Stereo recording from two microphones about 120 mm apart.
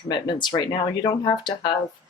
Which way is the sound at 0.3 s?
40° left (ahead or behind).